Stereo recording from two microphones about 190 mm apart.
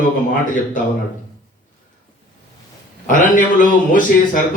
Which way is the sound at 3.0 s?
45° left (ahead or behind).